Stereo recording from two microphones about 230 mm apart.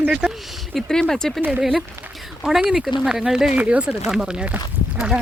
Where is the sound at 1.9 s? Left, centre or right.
Centre.